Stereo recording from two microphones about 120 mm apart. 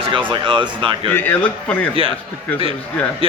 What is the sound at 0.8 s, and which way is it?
Speech, 45° right (ahead or behind).